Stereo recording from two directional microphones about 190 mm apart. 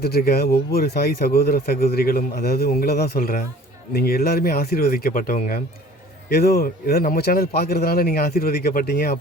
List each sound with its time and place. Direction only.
0.0 s speech: 55° left (ahead or behind)